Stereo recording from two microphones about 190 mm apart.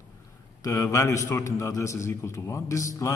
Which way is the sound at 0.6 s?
20° left (ahead or behind).